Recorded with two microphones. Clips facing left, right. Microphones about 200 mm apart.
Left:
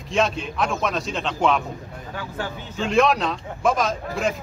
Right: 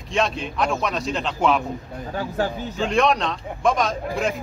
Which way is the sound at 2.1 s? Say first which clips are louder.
Right 7 dB; 40° right (ahead or behind).